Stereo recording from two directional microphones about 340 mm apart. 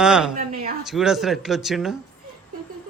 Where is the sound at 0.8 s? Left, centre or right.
Centre.